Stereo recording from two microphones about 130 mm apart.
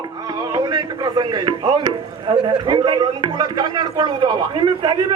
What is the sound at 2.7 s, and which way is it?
A man's voice, 30° right (ahead or behind).